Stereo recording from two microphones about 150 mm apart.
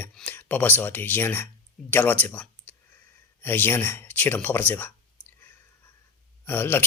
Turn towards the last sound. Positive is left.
turn(degrees=15)  # may be behind; listen again after turning